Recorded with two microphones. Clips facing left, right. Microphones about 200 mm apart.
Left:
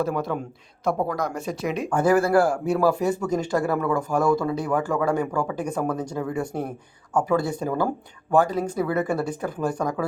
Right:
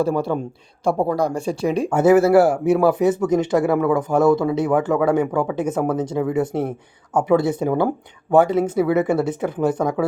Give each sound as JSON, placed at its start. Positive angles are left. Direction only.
{"t": 0.0, "sound": "speech", "side_deg": -30}